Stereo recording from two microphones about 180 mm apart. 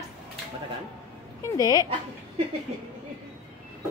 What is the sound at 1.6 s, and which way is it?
Speech, 20° left (ahead or behind).